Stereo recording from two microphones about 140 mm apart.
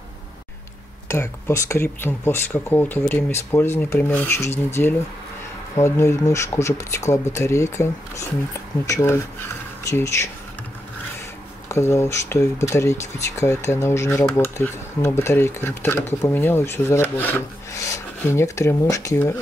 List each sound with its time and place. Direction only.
1.0 s speech: 20° left (ahead or behind)
11.7 s speech: 20° left (ahead or behind)